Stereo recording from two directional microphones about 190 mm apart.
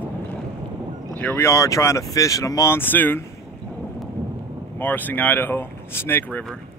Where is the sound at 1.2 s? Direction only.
10° left (ahead or behind).